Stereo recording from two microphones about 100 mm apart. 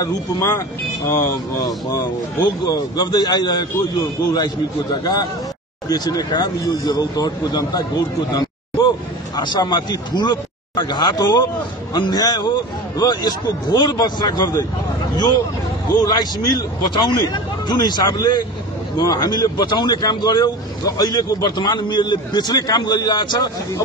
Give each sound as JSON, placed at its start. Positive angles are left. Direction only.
{"t": 0.0, "sound": "speech", "side_deg": 35}
{"t": 2.4, "sound": "speech", "side_deg": 45}
{"t": 8.3, "sound": "a sound", "side_deg": 40}
{"t": 9.4, "sound": "speech", "side_deg": 50}
{"t": 16.0, "sound": "speech", "side_deg": 40}